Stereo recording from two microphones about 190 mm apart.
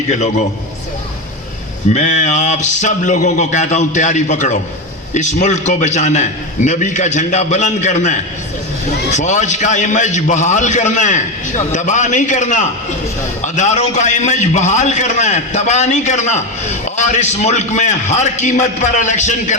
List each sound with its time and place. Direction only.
1.9 s a man's voice: 40° left (ahead or behind)